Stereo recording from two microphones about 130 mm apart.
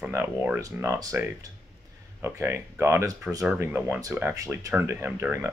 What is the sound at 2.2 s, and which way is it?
Speech, 20° right (ahead or behind).